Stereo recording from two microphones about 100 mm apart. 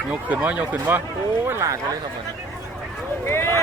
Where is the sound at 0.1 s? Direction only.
15° right (ahead or behind).